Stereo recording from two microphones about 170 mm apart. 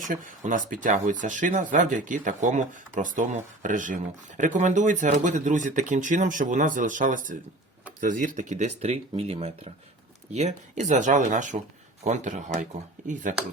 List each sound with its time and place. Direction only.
0.0 s speech: 50° right (ahead or behind)